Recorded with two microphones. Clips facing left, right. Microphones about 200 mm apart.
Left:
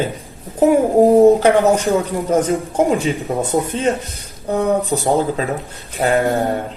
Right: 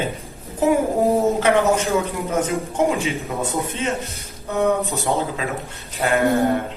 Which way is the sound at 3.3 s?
30° left (ahead or behind).